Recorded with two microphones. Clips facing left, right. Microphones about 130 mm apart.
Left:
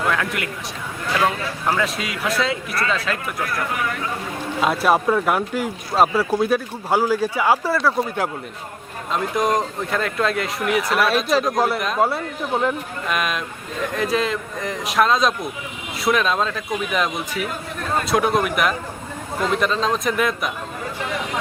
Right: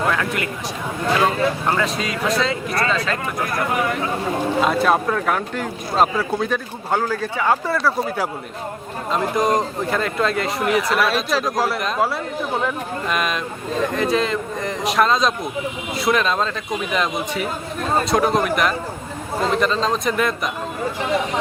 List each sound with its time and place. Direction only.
0.1 s speech: centre (ahead or behind)
1.0 s speech: 25° right (ahead or behind)
1.6 s speech: 5° left (ahead or behind)
3.7 s speech: 25° right (ahead or behind)
4.6 s speech: 5° left (ahead or behind)